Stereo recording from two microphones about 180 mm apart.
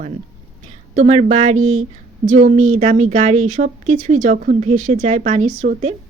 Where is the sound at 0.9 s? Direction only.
35° right (ahead or behind).